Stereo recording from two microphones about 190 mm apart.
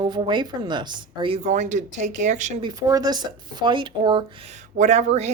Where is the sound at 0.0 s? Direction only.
25° right (ahead or behind).